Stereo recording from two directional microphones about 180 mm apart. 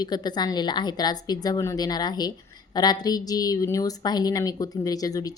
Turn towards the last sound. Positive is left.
turn(degrees=20)  # may be behind; listen again after turning